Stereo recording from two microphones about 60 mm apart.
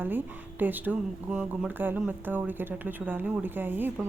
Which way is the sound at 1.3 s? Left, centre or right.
Centre.